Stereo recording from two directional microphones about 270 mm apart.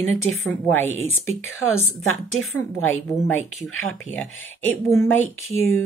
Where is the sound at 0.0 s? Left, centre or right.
Left.